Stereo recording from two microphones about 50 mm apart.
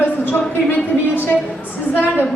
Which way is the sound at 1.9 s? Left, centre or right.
Left.